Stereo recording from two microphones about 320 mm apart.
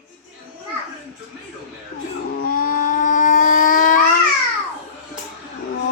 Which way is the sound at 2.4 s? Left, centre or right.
Left.